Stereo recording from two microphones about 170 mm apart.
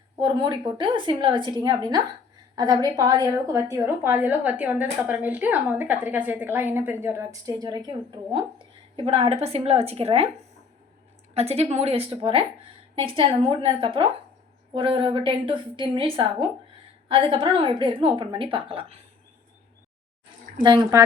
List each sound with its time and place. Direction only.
0.2 s a woman's voice: 25° right (ahead or behind)
11.3 s a woman's voice: 40° right (ahead or behind)
20.6 s a woman's voice: 25° right (ahead or behind)